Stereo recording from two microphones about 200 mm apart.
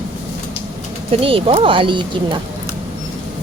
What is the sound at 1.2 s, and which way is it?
Speech, 30° right (ahead or behind).